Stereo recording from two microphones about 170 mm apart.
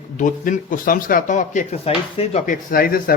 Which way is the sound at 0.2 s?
50° left (ahead or behind).